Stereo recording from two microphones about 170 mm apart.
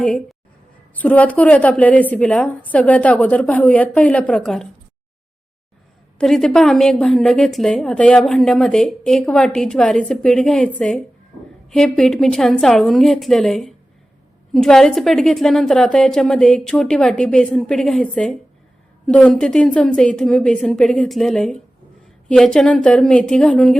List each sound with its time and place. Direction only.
0.0 s a woman's voice: 5° left (ahead or behind)
6.1 s a woman's voice: centre (ahead or behind)